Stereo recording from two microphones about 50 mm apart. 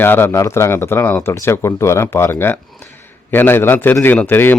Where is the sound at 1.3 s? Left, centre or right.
Left.